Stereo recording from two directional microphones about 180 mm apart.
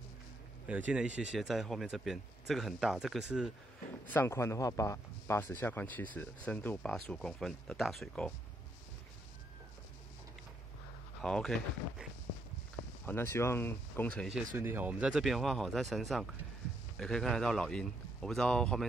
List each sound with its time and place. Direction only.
0.7 s speech: 10° right (ahead or behind)
4.1 s speech: 15° left (ahead or behind)
11.2 s speech: 5° left (ahead or behind)
14.6 s speech: 10° right (ahead or behind)